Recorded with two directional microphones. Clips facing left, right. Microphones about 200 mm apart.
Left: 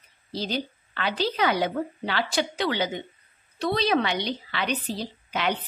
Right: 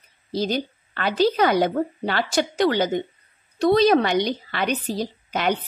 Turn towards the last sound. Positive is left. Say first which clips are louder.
# right 4 dB
turn(degrees=-45)  # may be behind; listen again after turning